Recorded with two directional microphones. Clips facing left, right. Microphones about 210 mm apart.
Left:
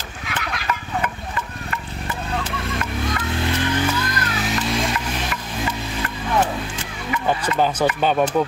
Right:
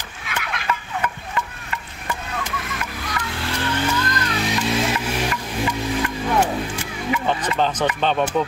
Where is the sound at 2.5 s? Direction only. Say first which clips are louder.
Left 4 dB; 30° left (ahead or behind).